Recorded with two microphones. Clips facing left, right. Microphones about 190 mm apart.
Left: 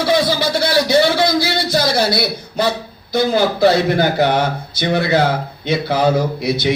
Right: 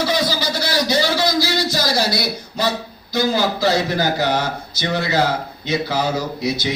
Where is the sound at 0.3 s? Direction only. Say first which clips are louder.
Left 5 dB; 60° left (ahead or behind).